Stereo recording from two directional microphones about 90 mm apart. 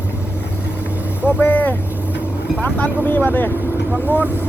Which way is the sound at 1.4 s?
20° left (ahead or behind).